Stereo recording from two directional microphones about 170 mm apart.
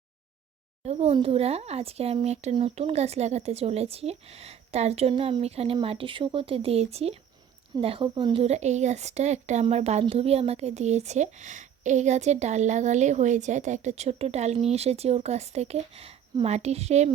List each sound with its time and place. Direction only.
0.9 s speech: 35° right (ahead or behind)